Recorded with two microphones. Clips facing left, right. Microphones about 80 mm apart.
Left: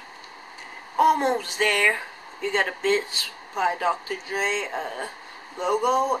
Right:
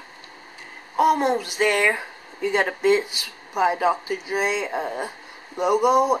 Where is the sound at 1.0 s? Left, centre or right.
Centre.